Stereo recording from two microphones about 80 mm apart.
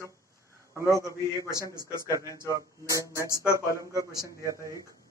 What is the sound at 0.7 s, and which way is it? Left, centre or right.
Speech, right.